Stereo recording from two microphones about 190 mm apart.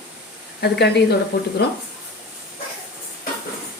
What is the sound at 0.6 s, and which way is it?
Speech, 60° left (ahead or behind).